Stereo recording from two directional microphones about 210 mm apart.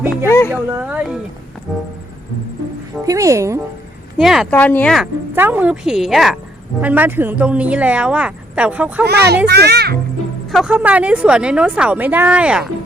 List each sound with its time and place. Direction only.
0.3 s a sound: 10° left (ahead or behind)
0.5 s a woman's voice: 5° right (ahead or behind)
3.1 s a woman's voice: 15° right (ahead or behind)
4.2 s speech: centre (ahead or behind)
5.3 s a woman's voice: 10° right (ahead or behind)
9.0 s a child's voice: 50° right (ahead or behind)
10.5 s a woman's voice: 5° right (ahead or behind)